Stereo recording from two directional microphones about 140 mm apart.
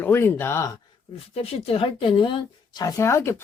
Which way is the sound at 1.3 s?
45° left (ahead or behind).